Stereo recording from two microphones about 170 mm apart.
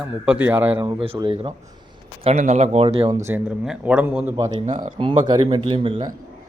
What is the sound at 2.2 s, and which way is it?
Speech, 40° right (ahead or behind).